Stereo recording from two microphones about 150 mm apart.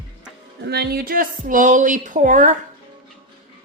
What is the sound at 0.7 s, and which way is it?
A woman's voice, 90° right.